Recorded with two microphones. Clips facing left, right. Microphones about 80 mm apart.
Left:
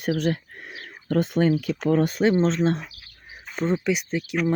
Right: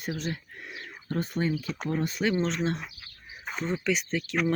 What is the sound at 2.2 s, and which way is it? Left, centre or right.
Speech, left.